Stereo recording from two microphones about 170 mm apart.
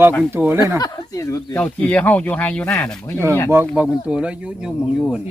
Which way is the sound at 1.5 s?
10° left (ahead or behind).